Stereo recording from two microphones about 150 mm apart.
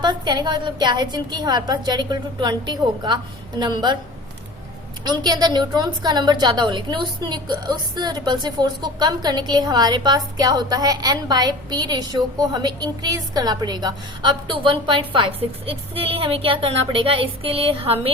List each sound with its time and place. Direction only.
0.0 s a woman's voice: 30° right (ahead or behind)
5.0 s a woman's voice: 25° right (ahead or behind)